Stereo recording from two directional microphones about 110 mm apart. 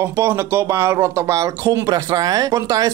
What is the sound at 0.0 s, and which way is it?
Speech, 25° right (ahead or behind).